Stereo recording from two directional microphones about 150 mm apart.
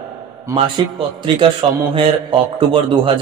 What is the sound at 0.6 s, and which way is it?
A man's voice, 35° right (ahead or behind).